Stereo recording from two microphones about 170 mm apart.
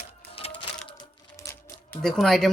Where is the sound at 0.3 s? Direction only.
30° left (ahead or behind).